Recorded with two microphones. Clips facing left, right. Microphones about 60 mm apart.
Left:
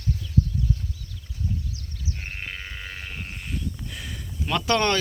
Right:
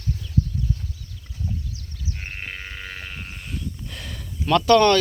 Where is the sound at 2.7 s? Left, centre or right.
Right.